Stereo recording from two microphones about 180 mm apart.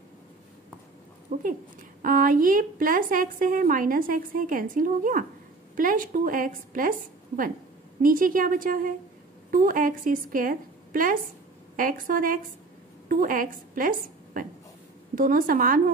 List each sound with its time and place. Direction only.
1.3 s a woman's voice: 45° right (ahead or behind)
8.0 s a woman's voice: 50° right (ahead or behind)